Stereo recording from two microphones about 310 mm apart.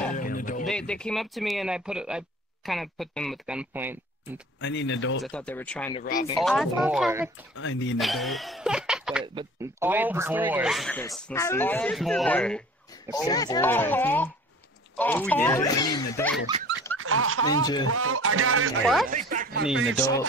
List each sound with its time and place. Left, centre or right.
0.1 s a sound: left
0.7 s speech: centre
4.6 s speech: left
5.2 s speech: centre
5.9 s speech: left
6.4 s speech: centre
7.5 s speech: left
8.0 s speech: centre
9.2 s speech: centre
16.9 s speech: right
17.5 s speech: centre
17.8 s speech: right
19.0 s speech: right
20.0 s speech: centre